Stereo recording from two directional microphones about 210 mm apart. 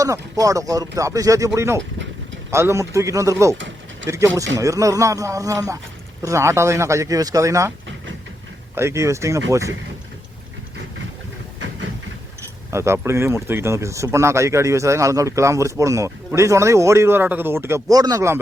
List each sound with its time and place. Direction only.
0.0 s speech: 15° right (ahead or behind)
4.0 s speech: 60° right (ahead or behind)
4.5 s speech: 15° right (ahead or behind)
8.7 s speech: 15° right (ahead or behind)
12.7 s speech: 15° right (ahead or behind)